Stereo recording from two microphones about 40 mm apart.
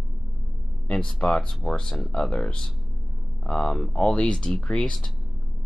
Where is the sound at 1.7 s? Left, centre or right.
Centre.